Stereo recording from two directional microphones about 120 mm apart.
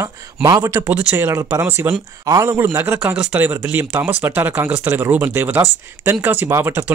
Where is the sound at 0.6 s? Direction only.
25° right (ahead or behind).